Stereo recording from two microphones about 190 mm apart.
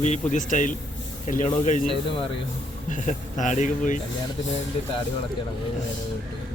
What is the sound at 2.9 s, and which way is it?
Speech, 40° left (ahead or behind).